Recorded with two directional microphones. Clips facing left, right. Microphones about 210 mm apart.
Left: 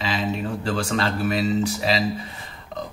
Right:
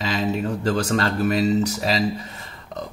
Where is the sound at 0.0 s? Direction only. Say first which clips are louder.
Right 2 dB; 45° right (ahead or behind).